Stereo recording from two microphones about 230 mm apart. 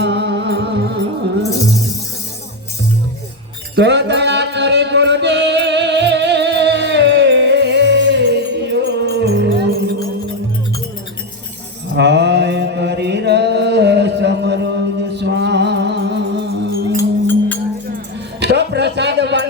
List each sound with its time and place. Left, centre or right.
0.0 s music: right
3.8 s music: right
11.9 s mantra: right
17.0 s music: centre
17.9 s a sound: right